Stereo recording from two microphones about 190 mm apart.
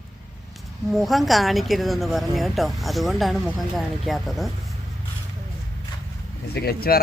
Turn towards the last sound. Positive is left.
turn(degrees=55)  # may be behind; listen again after turning